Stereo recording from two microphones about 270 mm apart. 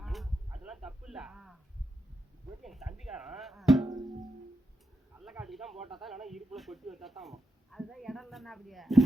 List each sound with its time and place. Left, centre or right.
0.0 s a sound: centre
2.6 s speech: centre
3.8 s music: centre
5.1 s speech: centre